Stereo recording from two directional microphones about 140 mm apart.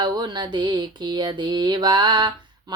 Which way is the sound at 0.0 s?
30° right (ahead or behind).